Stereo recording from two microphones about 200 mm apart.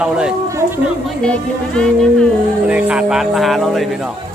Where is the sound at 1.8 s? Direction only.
5° left (ahead or behind).